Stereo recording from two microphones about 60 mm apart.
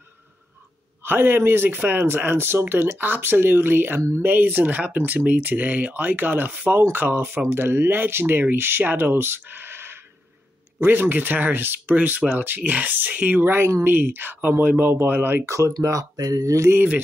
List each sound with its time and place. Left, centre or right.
1.0 s speech: right
15.8 s speech: right
16.6 s speech: right